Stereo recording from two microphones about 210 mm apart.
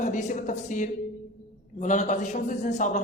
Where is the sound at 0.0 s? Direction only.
35° left (ahead or behind).